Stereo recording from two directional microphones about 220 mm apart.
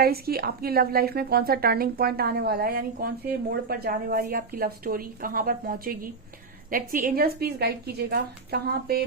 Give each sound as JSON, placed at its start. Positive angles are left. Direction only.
{"t": 0.0, "sound": "a woman's voice", "side_deg": -45}